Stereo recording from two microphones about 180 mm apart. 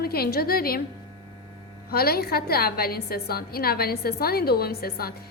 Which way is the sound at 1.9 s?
60° left (ahead or behind).